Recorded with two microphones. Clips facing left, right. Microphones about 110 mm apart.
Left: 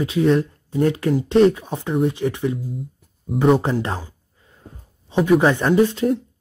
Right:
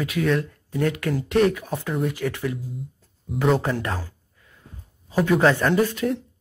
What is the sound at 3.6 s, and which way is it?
Speech, 30° left (ahead or behind).